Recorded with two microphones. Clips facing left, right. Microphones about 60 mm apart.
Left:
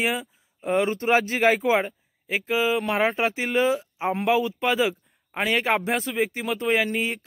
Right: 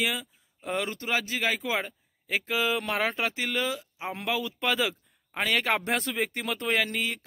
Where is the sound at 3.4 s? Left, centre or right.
Left.